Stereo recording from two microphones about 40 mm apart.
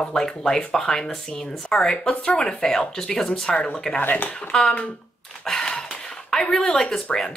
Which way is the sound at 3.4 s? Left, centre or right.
Left.